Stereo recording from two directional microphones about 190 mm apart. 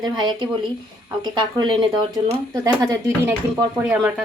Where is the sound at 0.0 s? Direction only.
20° right (ahead or behind).